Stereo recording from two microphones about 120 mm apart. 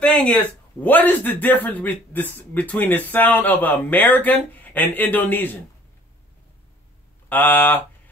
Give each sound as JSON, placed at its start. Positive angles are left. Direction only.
{"t": 0.0, "sound": "a man's voice", "side_deg": 10}
{"t": 7.2, "sound": "a man's voice", "side_deg": 15}